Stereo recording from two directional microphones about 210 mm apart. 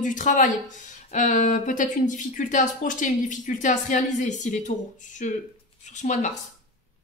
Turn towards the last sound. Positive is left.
turn(degrees=35)  # may be behind; listen again after turning